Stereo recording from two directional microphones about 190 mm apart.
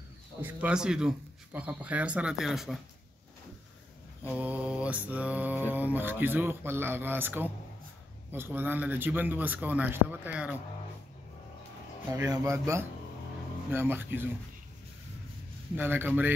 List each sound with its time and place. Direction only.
0.4 s speech: 5° right (ahead or behind)
4.3 s mantra: 10° right (ahead or behind)
12.2 s mantra: 15° right (ahead or behind)
15.7 s mantra: 10° right (ahead or behind)